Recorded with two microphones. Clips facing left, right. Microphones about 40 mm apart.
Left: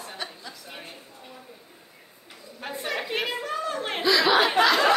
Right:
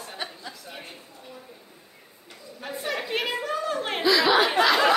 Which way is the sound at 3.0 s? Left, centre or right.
Centre.